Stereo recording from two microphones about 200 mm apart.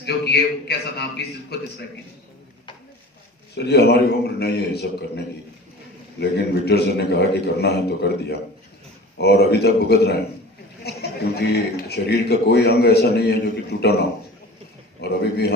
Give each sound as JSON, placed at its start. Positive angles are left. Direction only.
{"t": 0.0, "sound": "a man's voice", "side_deg": 55}
{"t": 3.5, "sound": "a man's voice", "side_deg": 55}
{"t": 10.8, "sound": "a sound", "side_deg": 55}
{"t": 11.9, "sound": "a man's voice", "side_deg": 55}
{"t": 15.0, "sound": "a man's voice", "side_deg": 55}